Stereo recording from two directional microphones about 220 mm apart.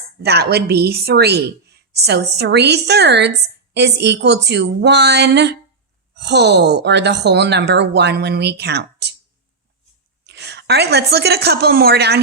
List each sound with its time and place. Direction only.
0.2 s a woman's voice: 45° right (ahead or behind)
10.2 s a woman's voice: 50° right (ahead or behind)